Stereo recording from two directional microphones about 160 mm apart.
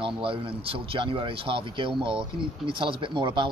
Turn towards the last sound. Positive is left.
turn(degrees=-30)  # may be behind; listen again after turning